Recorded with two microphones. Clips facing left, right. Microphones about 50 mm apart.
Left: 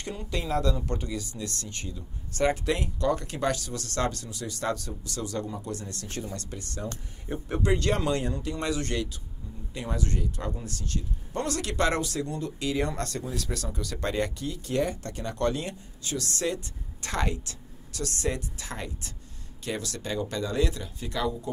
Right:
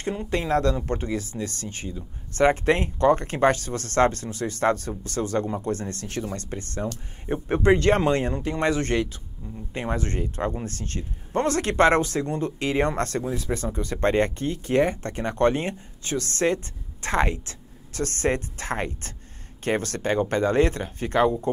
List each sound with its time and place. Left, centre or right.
0.0 s speech: right
0.7 s speech: right
13.3 s speech: right
13.9 s speech: right